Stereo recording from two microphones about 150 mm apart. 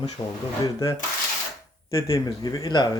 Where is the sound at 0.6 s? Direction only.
20° left (ahead or behind).